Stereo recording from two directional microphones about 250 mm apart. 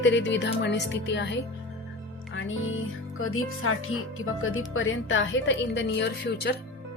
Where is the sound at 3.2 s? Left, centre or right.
Left.